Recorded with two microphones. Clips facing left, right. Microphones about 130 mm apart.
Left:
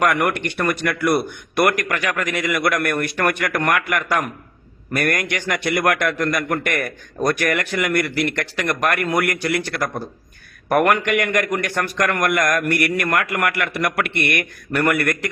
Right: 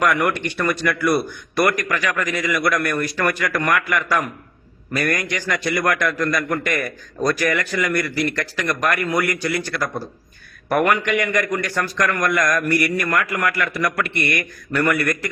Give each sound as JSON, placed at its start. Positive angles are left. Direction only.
{"t": 0.0, "sound": "a man's voice", "side_deg": 55}
{"t": 11.7, "sound": "a man's voice", "side_deg": 20}
{"t": 12.2, "sound": "speech", "side_deg": 55}